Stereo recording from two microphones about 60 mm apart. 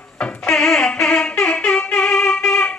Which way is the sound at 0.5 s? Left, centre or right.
Centre.